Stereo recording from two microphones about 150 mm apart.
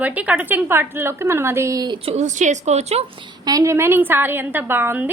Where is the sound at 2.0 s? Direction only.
45° right (ahead or behind).